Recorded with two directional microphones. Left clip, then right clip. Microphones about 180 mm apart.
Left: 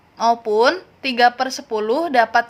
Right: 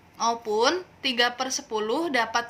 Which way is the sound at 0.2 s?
55° left (ahead or behind).